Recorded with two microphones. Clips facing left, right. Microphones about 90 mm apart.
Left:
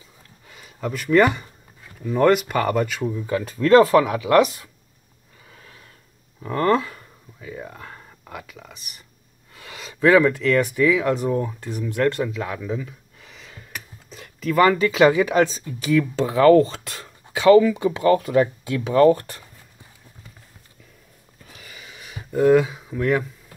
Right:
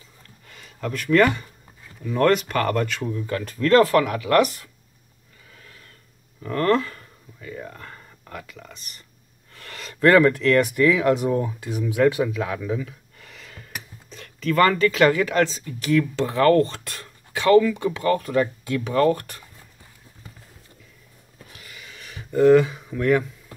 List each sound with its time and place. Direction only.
0.5 s speech: 10° left (ahead or behind)
6.4 s speech: 10° left (ahead or behind)
21.6 s a sound: 20° left (ahead or behind)
22.3 s speech: 5° left (ahead or behind)